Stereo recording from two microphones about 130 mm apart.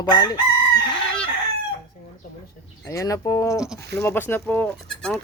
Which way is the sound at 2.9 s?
25° left (ahead or behind).